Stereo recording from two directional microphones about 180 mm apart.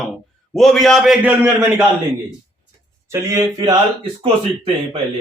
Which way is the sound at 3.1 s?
15° right (ahead or behind).